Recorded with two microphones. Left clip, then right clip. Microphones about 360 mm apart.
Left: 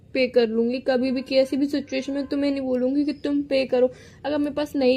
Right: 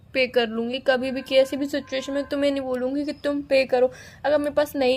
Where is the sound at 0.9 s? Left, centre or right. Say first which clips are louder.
Right 5 dB; right.